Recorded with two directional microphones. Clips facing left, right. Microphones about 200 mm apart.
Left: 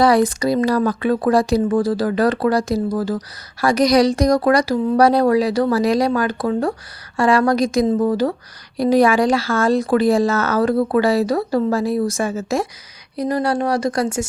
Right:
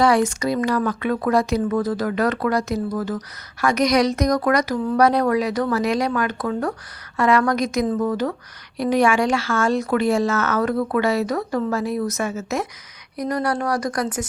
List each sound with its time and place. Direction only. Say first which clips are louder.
0.0 s speech: left 3 dB; 35° left (ahead or behind)